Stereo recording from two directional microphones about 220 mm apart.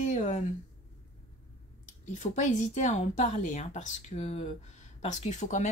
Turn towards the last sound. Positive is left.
turn(degrees=30)  # may be behind; listen again after turning